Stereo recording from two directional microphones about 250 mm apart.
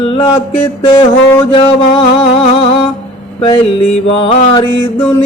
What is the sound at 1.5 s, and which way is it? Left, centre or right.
Music, left.